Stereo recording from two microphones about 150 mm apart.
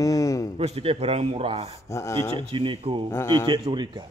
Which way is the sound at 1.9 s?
20° left (ahead or behind).